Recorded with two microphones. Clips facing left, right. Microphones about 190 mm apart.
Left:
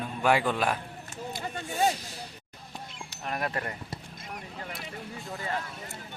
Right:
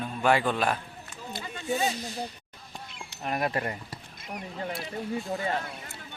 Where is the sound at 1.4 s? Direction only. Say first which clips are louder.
Left 1 dB; 50° left (ahead or behind).